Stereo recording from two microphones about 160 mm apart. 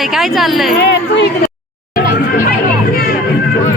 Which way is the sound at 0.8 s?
90° left.